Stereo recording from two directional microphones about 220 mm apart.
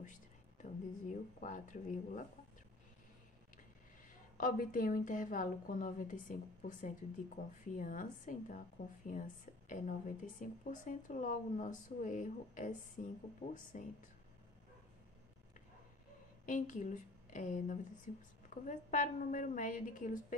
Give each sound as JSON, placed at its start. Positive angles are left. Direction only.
{"t": 0.0, "sound": "speech", "side_deg": 35}
{"t": 4.4, "sound": "a woman's voice", "side_deg": 40}
{"t": 16.4, "sound": "a woman's voice", "side_deg": 35}